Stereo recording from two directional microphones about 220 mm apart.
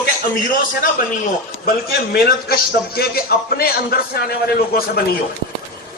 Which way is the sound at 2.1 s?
45° left (ahead or behind).